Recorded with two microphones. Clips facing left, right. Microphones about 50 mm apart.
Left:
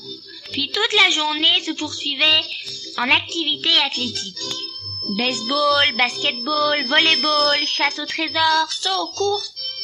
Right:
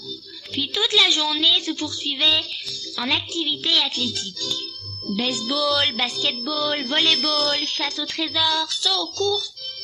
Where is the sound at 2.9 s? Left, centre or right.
Left.